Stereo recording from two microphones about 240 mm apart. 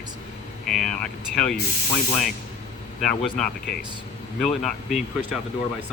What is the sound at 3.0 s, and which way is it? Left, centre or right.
Speech, centre.